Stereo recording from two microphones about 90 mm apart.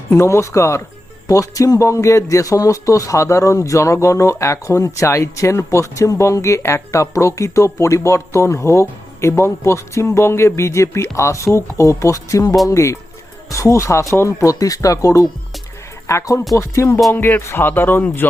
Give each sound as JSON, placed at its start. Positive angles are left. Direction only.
{"t": 0.1, "sound": "speech", "side_deg": 30}
{"t": 17.2, "sound": "speech", "side_deg": 25}